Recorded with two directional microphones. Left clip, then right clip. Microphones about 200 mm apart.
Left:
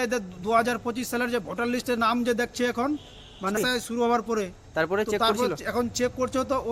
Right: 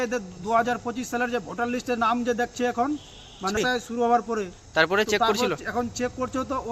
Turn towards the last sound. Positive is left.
turn(degrees=20)  # may be behind; listen again after turning